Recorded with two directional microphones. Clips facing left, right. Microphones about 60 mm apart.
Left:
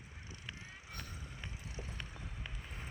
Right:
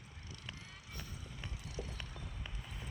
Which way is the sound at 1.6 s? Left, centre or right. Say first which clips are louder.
Right 3 dB; left.